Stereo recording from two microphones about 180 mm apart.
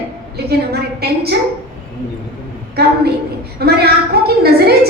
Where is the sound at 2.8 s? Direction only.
60° right (ahead or behind).